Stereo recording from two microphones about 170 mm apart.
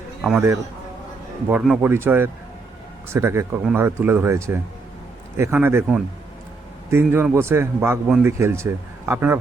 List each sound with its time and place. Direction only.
0.3 s speech: 15° right (ahead or behind)